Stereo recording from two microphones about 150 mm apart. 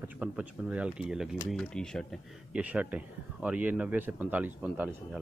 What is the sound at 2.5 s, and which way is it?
Speech, 10° right (ahead or behind).